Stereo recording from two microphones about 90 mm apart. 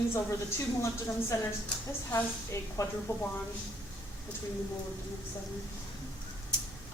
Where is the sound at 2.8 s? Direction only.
35° left (ahead or behind).